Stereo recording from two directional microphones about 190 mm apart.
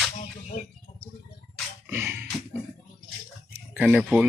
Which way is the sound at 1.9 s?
10° right (ahead or behind).